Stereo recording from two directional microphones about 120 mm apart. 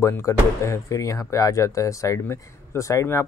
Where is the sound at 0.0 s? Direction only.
25° left (ahead or behind).